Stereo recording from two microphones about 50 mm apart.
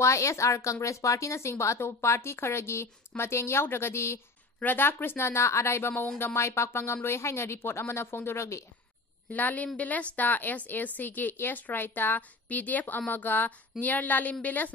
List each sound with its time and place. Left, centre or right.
0.0 s speech: left
4.6 s speech: left
9.3 s a woman's voice: left